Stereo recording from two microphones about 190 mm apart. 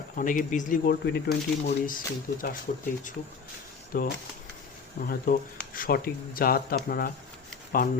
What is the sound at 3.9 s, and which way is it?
Speech, 50° left (ahead or behind).